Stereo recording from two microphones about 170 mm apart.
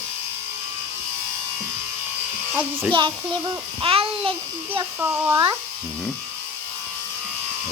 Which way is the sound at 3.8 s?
30° right (ahead or behind).